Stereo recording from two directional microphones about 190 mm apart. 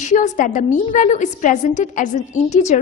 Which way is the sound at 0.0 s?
40° left (ahead or behind).